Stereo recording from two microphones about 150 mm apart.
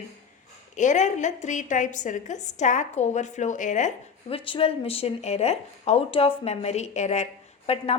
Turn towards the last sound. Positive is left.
turn(degrees=40)  # may be behind; listen again after turning